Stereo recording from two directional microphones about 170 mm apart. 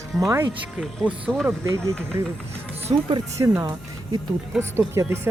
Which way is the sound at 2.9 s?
35° right (ahead or behind).